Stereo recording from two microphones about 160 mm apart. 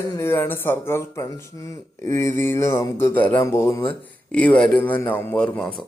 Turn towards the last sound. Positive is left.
turn(degrees=5)  # may be behind; listen again after turning